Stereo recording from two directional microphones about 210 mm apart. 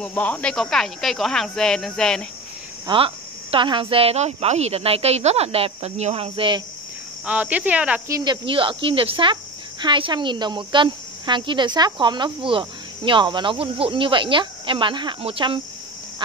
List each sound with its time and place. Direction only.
0.0 s speech: 5° left (ahead or behind)
2.9 s speech: 20° right (ahead or behind)
7.2 s speech: 5° right (ahead or behind)
8.2 s speech: 20° right (ahead or behind)